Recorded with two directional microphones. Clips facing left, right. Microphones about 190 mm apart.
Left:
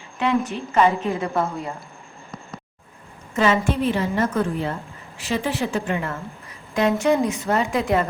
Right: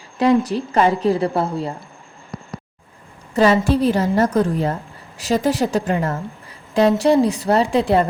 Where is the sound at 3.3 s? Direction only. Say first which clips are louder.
Right 5 dB; 35° right (ahead or behind).